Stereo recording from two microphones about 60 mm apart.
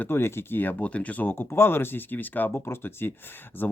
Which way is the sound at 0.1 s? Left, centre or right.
Left.